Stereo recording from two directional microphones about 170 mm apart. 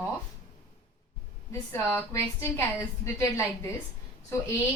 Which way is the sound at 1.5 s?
15° left (ahead or behind).